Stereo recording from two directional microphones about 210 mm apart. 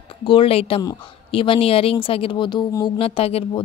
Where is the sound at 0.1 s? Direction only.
25° left (ahead or behind).